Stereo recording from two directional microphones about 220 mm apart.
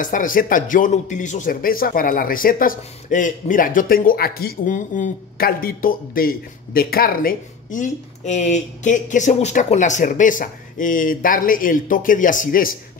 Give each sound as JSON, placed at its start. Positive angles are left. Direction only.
{"t": 0.0, "sound": "speech", "side_deg": 35}